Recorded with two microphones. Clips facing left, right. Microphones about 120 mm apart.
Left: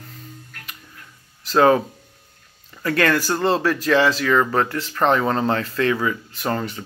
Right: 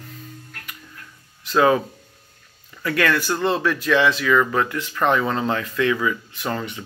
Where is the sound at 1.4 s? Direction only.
35° left (ahead or behind).